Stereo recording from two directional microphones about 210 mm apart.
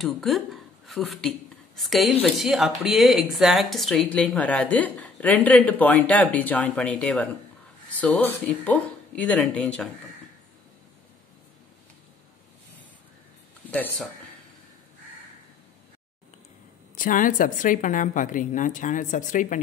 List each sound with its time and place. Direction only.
0.0 s speech: centre (ahead or behind)
13.7 s speech: 10° left (ahead or behind)
16.9 s a woman's voice: 40° left (ahead or behind)